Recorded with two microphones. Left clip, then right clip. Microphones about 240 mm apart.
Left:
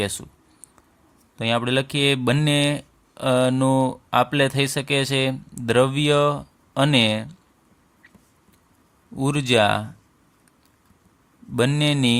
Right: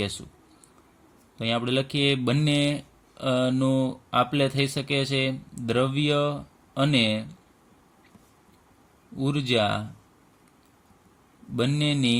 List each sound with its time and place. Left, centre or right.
0.0 s speech: left
1.4 s speech: left
9.1 s speech: left
11.5 s speech: left